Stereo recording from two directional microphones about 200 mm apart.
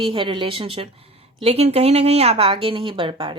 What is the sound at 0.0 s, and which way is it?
Speech, 25° right (ahead or behind).